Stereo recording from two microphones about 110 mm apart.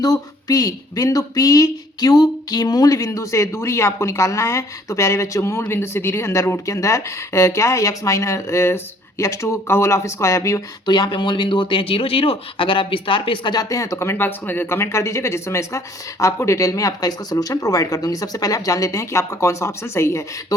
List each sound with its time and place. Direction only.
0.0 s speech: 35° left (ahead or behind)
10.8 s speech: 45° left (ahead or behind); by 20.6 s 25° left (ahead or behind)